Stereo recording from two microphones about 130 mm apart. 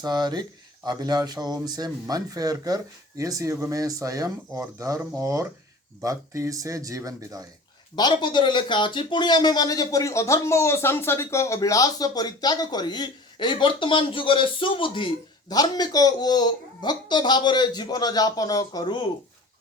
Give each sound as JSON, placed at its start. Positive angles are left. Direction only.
{"t": 0.0, "sound": "speech", "side_deg": -30}
{"t": 7.9, "sound": "speech", "side_deg": 35}